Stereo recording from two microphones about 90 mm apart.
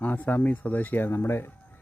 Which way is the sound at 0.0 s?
20° left (ahead or behind).